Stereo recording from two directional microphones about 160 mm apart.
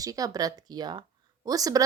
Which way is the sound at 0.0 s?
20° right (ahead or behind).